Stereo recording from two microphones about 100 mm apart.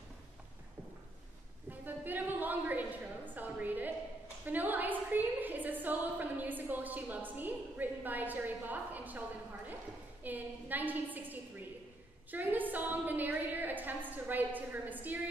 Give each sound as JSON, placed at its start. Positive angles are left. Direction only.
{"t": 1.7, "sound": "a sound", "side_deg": -20}
{"t": 4.5, "sound": "a woman's voice", "side_deg": -20}
{"t": 10.2, "sound": "a woman's voice", "side_deg": -20}